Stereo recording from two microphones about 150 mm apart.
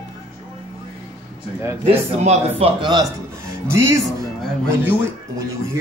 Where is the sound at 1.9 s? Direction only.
45° right (ahead or behind).